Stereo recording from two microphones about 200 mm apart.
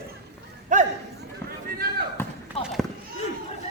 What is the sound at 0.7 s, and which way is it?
Speech, 40° right (ahead or behind).